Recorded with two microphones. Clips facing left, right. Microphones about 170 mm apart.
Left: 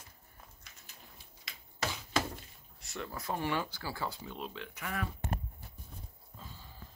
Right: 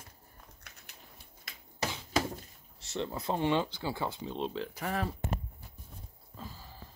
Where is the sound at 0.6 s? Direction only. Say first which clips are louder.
Right 3 dB; 60° right (ahead or behind).